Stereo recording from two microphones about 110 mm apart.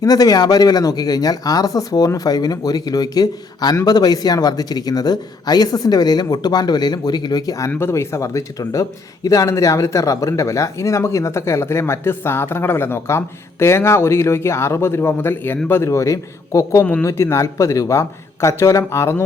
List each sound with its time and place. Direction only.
0.0 s speech: 35° left (ahead or behind)
7.7 s speech: 20° left (ahead or behind)